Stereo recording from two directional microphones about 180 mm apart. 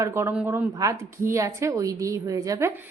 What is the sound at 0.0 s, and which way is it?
Speech, 15° right (ahead or behind).